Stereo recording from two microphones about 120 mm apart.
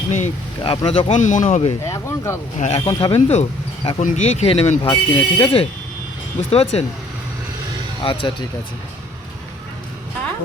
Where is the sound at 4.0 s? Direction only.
80° left; by 6.8 s 55° left (ahead or behind).